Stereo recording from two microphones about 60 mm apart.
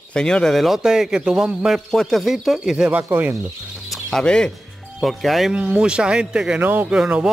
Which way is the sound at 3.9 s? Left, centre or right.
Centre.